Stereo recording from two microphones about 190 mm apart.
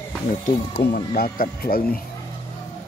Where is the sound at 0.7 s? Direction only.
50° left (ahead or behind).